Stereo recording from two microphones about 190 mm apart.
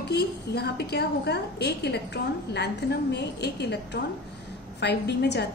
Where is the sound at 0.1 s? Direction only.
60° left (ahead or behind).